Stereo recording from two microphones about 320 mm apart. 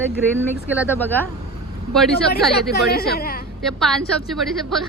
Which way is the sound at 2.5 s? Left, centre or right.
Left.